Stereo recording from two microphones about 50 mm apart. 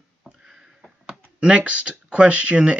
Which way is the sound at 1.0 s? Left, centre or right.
Centre.